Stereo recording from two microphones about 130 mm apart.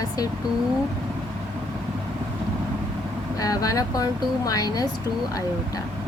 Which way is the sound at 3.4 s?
25° left (ahead or behind).